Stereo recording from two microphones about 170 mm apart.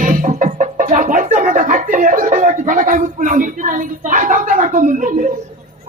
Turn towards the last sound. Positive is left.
turn(degrees=-50)  # may be behind; listen again after turning